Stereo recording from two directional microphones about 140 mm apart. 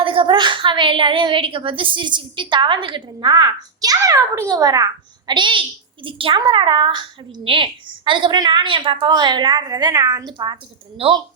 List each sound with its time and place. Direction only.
0.0 s a child's voice: 40° right (ahead or behind)